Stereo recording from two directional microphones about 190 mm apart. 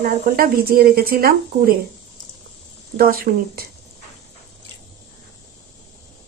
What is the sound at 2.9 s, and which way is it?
Speech, 50° right (ahead or behind).